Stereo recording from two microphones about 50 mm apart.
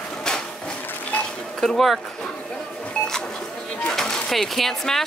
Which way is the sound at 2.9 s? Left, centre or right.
Centre.